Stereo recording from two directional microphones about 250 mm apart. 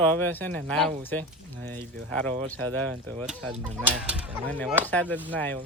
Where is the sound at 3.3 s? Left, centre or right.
Centre.